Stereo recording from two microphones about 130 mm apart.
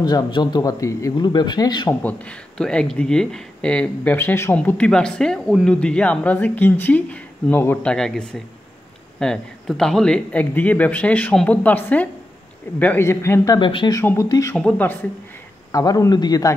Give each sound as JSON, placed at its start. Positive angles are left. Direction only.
{"t": 0.0, "sound": "speech", "side_deg": 35}
{"t": 2.0, "sound": "speech", "side_deg": 10}
{"t": 7.9, "sound": "speech", "side_deg": 5}
{"t": 13.6, "sound": "speech", "side_deg": 40}
{"t": 13.9, "sound": "speech", "side_deg": 25}
{"t": 14.6, "sound": "speech", "side_deg": 10}
{"t": 15.7, "sound": "speech", "side_deg": 30}